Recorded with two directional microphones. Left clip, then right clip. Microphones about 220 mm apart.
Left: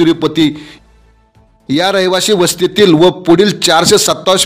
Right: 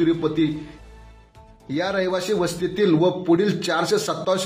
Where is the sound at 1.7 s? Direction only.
50° left (ahead or behind).